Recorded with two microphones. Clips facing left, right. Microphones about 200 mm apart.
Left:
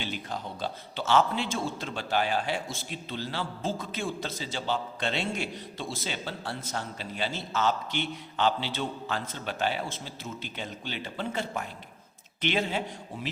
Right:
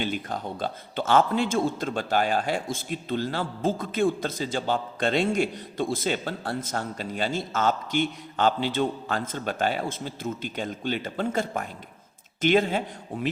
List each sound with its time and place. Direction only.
0.0 s speech: 50° right (ahead or behind)